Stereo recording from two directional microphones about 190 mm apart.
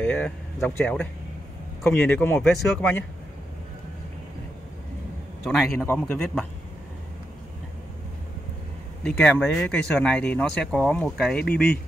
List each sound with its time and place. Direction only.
0.0 s speech: 5° left (ahead or behind)
5.9 s speech: 5° left (ahead or behind)
9.0 s speech: 5° left (ahead or behind)
11.3 s speech: 55° left (ahead or behind)